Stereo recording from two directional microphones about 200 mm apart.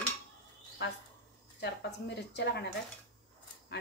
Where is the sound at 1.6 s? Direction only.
55° left (ahead or behind).